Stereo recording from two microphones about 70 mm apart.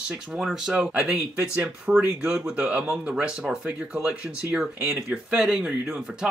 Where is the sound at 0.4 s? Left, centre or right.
Centre.